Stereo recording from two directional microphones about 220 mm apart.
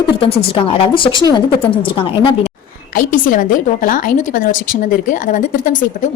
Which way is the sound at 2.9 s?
40° left (ahead or behind).